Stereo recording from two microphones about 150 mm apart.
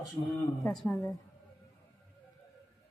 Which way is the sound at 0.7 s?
5° left (ahead or behind).